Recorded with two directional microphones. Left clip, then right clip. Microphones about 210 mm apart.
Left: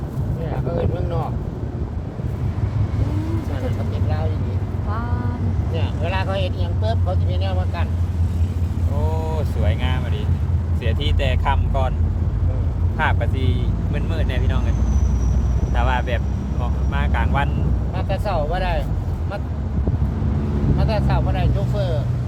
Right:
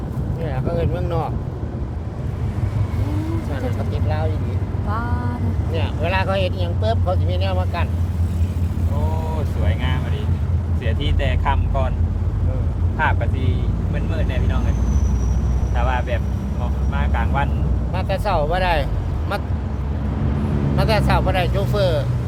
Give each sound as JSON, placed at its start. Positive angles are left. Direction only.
{"t": 0.4, "sound": "a sound", "side_deg": -55}
{"t": 5.7, "sound": "speech", "side_deg": -55}
{"t": 9.6, "sound": "speech", "side_deg": 35}
{"t": 13.0, "sound": "speech", "side_deg": 40}
{"t": 15.7, "sound": "vehicle", "side_deg": 45}
{"t": 16.9, "sound": "speech", "side_deg": 55}
{"t": 17.9, "sound": "speech", "side_deg": -55}
{"t": 20.7, "sound": "speech", "side_deg": -55}